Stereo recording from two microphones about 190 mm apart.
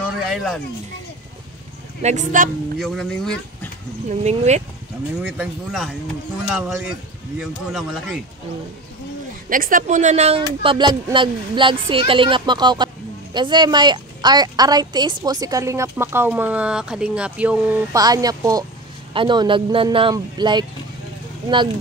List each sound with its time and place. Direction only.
0.0 s a sound: centre (ahead or behind)
2.0 s speech: 40° right (ahead or behind)
2.8 s a man's voice: 5° left (ahead or behind)
4.1 s speech: 35° right (ahead or behind)
5.2 s a man's voice: 5° right (ahead or behind)
9.5 s speech: 45° right (ahead or behind); by 17.8 s 5° right (ahead or behind)
17.9 s speech: 20° right (ahead or behind)